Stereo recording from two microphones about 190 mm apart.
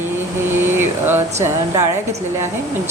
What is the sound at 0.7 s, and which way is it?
Speech, 10° right (ahead or behind).